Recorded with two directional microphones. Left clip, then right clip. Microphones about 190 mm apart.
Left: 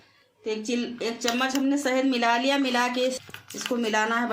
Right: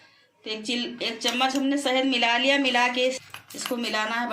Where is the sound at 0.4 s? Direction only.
45° left (ahead or behind).